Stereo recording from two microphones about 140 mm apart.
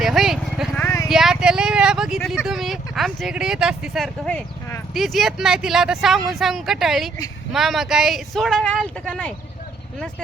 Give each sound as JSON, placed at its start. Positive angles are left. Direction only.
{"t": 0.0, "sound": "clip-clop", "side_deg": 0}
{"t": 0.8, "sound": "a sound", "side_deg": 20}
{"t": 1.0, "sound": "speech", "side_deg": 0}